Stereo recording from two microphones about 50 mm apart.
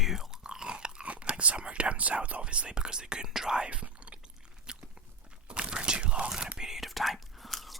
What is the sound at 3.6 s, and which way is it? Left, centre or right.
Whispering, right.